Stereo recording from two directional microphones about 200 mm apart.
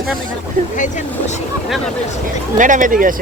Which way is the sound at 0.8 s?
40° left (ahead or behind).